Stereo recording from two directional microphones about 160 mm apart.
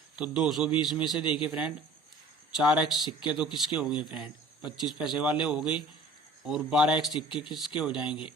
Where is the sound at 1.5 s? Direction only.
10° right (ahead or behind).